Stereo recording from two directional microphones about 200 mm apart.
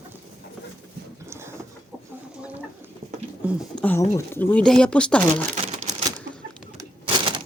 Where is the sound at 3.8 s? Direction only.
10° left (ahead or behind).